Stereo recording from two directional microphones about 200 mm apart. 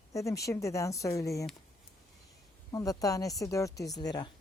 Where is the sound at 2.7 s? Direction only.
15° left (ahead or behind).